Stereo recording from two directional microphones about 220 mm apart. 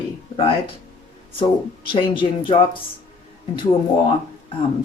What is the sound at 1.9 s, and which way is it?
Speech, 20° left (ahead or behind).